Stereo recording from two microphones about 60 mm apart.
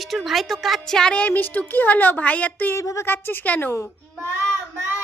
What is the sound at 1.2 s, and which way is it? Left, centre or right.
A child's voice, left.